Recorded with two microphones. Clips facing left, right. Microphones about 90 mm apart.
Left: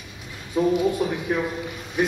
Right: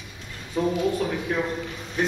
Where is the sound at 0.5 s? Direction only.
10° left (ahead or behind).